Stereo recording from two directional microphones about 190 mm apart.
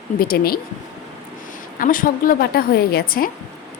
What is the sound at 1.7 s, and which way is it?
A woman's voice, 45° left (ahead or behind).